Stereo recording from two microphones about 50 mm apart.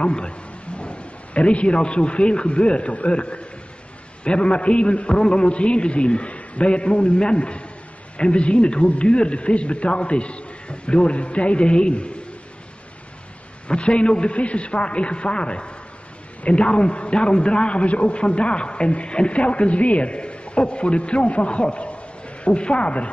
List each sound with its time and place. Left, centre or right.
0.0 s a man's voice: left
13.7 s a man's voice: left